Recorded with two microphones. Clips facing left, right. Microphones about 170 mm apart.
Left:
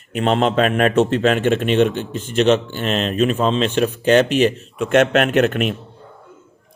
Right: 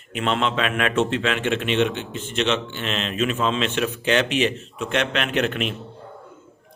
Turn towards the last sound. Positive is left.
turn(degrees=50)  # may be behind; listen again after turning